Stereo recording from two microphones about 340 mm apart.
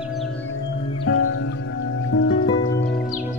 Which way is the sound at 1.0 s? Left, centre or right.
Left.